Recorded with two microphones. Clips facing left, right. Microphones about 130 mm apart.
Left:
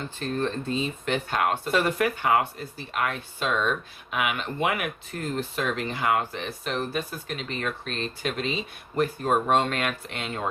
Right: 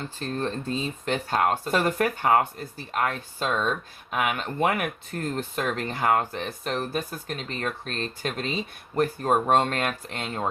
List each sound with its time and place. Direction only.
0.2 s speech: 35° right (ahead or behind)